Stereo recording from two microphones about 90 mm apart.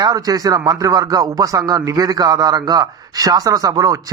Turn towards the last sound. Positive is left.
turn(degrees=-40)  # may be behind; listen again after turning